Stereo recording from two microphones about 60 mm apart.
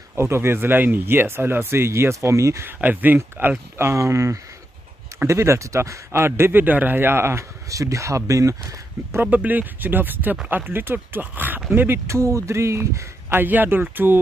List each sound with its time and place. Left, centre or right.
0.1 s speech: right
2.6 s speech: right
6.6 s speech: right
7.7 s speech: right
9.2 s speech: right
12.1 s speech: right